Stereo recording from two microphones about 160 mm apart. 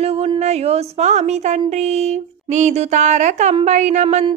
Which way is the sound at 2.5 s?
45° right (ahead or behind).